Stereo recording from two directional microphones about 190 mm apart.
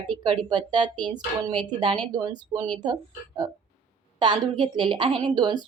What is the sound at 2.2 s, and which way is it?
A woman's voice, 20° right (ahead or behind).